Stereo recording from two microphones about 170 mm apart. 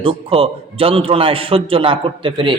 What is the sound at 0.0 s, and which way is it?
A man's voice, 35° right (ahead or behind).